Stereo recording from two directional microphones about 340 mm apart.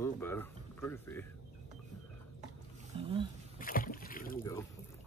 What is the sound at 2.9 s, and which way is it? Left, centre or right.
Speech, centre.